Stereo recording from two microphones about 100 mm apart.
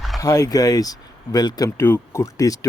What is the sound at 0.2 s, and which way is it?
Speech, 35° left (ahead or behind).